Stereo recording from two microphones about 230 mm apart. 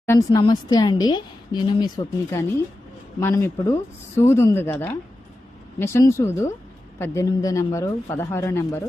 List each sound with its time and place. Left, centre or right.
0.0 s a woman's voice: centre